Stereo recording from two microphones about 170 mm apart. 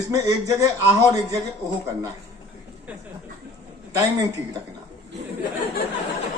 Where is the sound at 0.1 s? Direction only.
20° right (ahead or behind).